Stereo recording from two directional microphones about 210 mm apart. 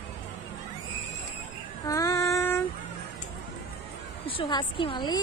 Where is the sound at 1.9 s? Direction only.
15° left (ahead or behind).